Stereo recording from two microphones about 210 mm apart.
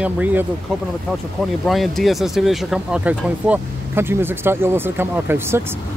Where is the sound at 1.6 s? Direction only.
Centre (ahead or behind).